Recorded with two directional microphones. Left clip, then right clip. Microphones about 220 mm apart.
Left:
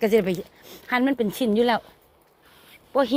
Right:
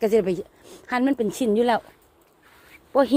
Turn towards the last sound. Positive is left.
turn(degrees=-20)  # may be behind; listen again after turning